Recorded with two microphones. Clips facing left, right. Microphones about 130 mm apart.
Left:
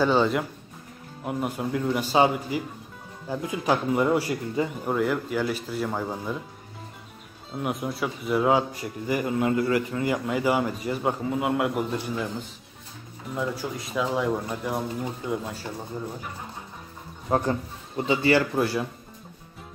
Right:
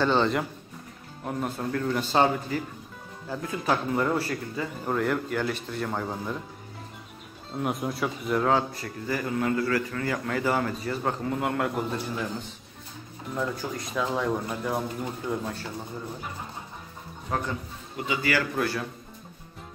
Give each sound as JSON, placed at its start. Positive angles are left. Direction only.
{"t": 0.0, "sound": "speech", "side_deg": 10}
{"t": 7.5, "sound": "speech", "side_deg": 0}
{"t": 13.3, "sound": "speech", "side_deg": 5}
{"t": 17.3, "sound": "speech", "side_deg": 35}